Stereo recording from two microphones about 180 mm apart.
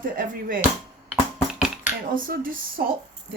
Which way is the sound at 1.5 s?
5° right (ahead or behind).